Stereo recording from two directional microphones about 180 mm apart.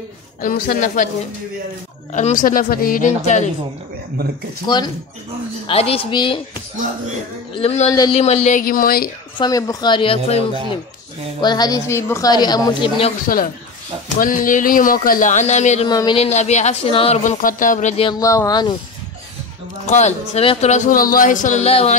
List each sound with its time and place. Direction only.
0.4 s speech: 50° left (ahead or behind)
2.1 s speech: 45° left (ahead or behind)
4.6 s a woman's voice: 25° left (ahead or behind)
7.5 s speech: 35° left (ahead or behind); by 9.1 s 55° left (ahead or behind)
9.4 s a woman's voice: 20° left (ahead or behind)
11.4 s a woman's voice: 20° left (ahead or behind)
14.2 s speech: 50° left (ahead or behind)
15.9 s a woman's voice: 20° left (ahead or behind)
16.2 s speech: 35° left (ahead or behind)
17.2 s speech: 45° left (ahead or behind)
18.0 s a woman's voice: 20° left (ahead or behind)
19.9 s speech: 40° left (ahead or behind)